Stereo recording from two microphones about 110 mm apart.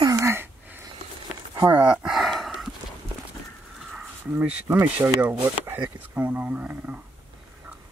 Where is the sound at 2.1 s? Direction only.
Centre (ahead or behind).